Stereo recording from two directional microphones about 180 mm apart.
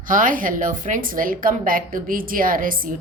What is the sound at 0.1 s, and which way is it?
A woman's voice, 45° right (ahead or behind).